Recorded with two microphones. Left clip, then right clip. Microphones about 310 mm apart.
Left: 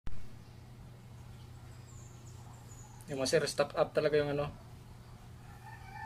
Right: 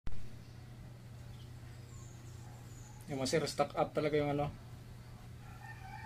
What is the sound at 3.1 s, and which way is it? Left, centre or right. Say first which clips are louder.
Speech: left 4 dB; left.